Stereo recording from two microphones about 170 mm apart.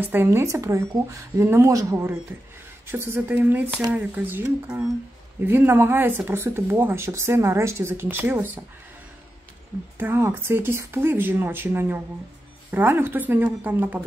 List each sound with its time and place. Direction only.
0.1 s speech: 15° right (ahead or behind)
9.9 s speech: 15° right (ahead or behind)